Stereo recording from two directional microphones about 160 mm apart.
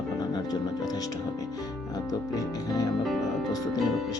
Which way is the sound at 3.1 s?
Centre (ahead or behind).